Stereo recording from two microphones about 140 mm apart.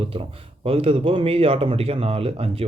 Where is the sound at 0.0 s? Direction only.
40° right (ahead or behind).